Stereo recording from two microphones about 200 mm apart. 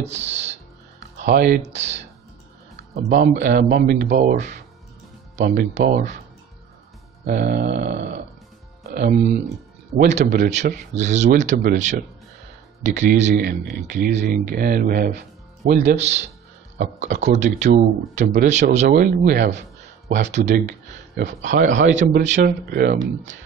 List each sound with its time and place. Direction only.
0.0 s music: 35° right (ahead or behind)
1.2 s speech: 50° right (ahead or behind)
1.6 s speech: 35° right (ahead or behind)
3.0 s speech: 40° right (ahead or behind)
7.4 s speech: 55° right (ahead or behind)
7.7 s speech: 35° right (ahead or behind)
8.8 s music: 50° right (ahead or behind)
9.9 s speech: 40° right (ahead or behind)
22.7 s speech: 50° right (ahead or behind)